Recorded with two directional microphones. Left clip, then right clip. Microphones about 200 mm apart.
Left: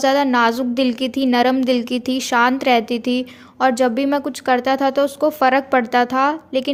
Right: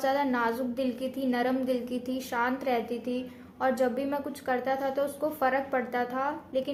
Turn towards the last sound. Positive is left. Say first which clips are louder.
# left 12 dB
turn(degrees=45)  # may be behind; listen again after turning